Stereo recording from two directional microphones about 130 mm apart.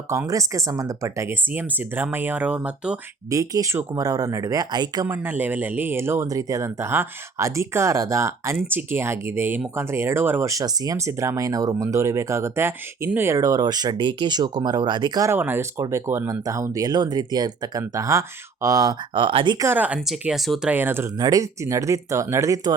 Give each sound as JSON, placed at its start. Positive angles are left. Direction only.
{"t": 0.1, "sound": "speech", "side_deg": -25}
{"t": 3.2, "sound": "speech", "side_deg": -25}
{"t": 5.0, "sound": "speech", "side_deg": -15}
{"t": 15.3, "sound": "speech", "side_deg": -15}
{"t": 19.5, "sound": "speech", "side_deg": -15}
{"t": 20.1, "sound": "speech", "side_deg": 0}
{"t": 20.7, "sound": "speech", "side_deg": -15}
{"t": 21.2, "sound": "speech", "side_deg": -30}